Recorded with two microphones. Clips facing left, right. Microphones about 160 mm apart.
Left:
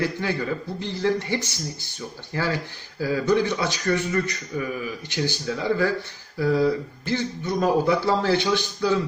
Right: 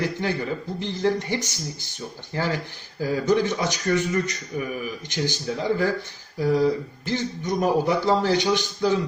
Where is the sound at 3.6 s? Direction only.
20° right (ahead or behind).